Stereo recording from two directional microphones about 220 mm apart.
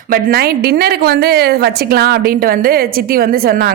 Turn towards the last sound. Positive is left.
turn(degrees=-45)  # may be behind; listen again after turning